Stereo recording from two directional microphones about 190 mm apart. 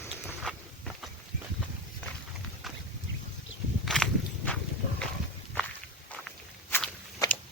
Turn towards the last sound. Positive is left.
turn(degrees=10)  # may be behind; listen again after turning